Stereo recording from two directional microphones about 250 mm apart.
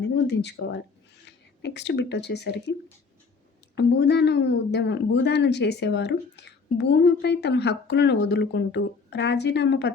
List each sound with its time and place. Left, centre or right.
0.0 s speech: left
3.8 s speech: left